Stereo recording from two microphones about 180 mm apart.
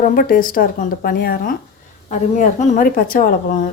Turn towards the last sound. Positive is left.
turn(degrees=50)  # may be behind; listen again after turning